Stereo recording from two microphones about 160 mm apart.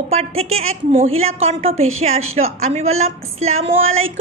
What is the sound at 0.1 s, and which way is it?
A woman's voice, 40° right (ahead or behind).